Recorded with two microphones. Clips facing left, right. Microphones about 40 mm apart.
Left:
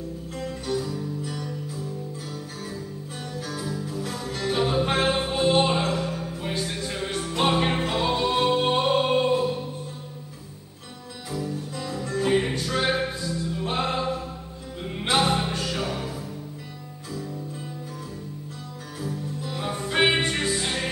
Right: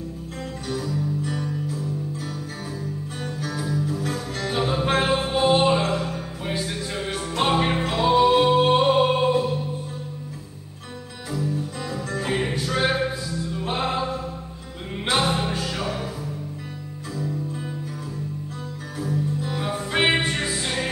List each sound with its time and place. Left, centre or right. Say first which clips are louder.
0.4 s music: left 1 dB; centre
3.4 s music: right 6 dB; centre
11.3 s music: right 3 dB; centre
15.0 s music: even; centre
19.0 s music: right 6 dB; centre